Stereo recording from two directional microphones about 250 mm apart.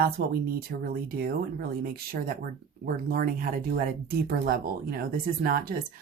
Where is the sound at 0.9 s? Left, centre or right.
Right.